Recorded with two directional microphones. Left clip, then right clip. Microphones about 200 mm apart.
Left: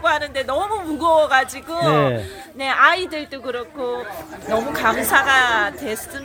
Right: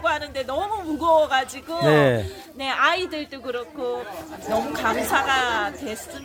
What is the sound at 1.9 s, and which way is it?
Speech, 20° right (ahead or behind).